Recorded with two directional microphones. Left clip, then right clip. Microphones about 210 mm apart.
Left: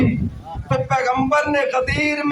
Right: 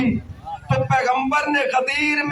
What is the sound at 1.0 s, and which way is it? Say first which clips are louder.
A man's voice: left 1 dB; 20° right (ahead or behind).